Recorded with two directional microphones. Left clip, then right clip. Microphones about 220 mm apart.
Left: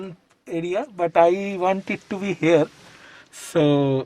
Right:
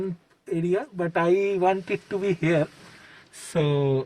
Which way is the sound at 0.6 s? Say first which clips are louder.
Left 3 dB; 35° left (ahead or behind).